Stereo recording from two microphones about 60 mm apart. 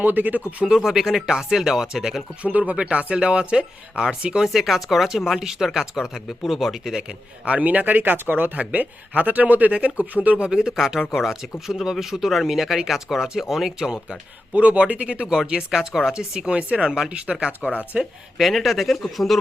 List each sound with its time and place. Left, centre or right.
0.0 s speech: right
0.8 s speech: centre
2.4 s speech: right
4.4 s speech: centre
7.4 s speech: right
14.5 s speech: right
15.4 s speech: centre
17.6 s speech: left
18.3 s speech: centre